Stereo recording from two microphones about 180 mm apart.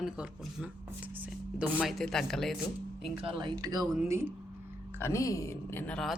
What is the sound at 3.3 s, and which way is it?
Speech, 20° right (ahead or behind).